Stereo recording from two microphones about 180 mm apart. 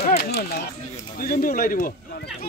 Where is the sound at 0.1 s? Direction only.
60° left (ahead or behind).